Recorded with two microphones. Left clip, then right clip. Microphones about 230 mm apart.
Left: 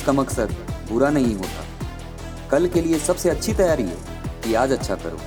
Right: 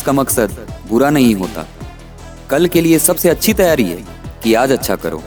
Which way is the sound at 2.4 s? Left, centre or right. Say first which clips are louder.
Right 7 dB; right.